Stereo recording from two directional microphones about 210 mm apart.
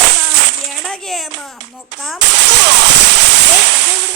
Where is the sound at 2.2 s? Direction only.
55° right (ahead or behind).